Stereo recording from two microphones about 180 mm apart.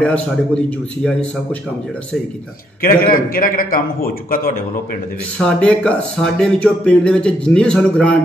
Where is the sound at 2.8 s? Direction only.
50° left (ahead or behind).